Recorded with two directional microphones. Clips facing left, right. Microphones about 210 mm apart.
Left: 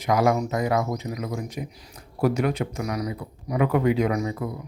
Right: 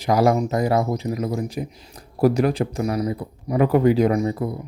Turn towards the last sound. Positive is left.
turn(degrees=-30)  # may be behind; listen again after turning